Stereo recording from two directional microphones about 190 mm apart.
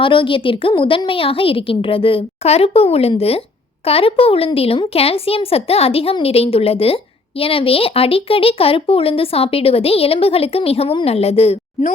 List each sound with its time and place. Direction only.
0.0 s a woman's voice: 25° left (ahead or behind)